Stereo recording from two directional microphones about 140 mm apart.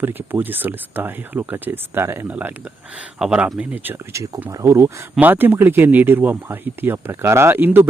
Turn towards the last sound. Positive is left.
turn(degrees=-15)  # may be behind; listen again after turning